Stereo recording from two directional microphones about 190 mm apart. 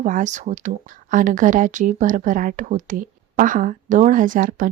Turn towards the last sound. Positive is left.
turn(degrees=-45)  # may be behind; listen again after turning